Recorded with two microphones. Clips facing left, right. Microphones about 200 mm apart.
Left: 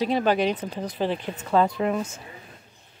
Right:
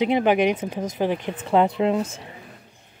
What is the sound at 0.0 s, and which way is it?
Speech, 20° right (ahead or behind).